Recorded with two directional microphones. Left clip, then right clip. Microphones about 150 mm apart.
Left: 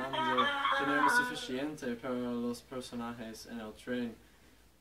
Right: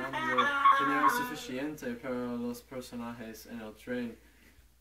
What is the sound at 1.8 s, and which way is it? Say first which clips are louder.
Speech: right 1 dB; 10° right (ahead or behind).